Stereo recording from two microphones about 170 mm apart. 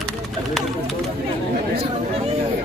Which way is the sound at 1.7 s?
35° right (ahead or behind).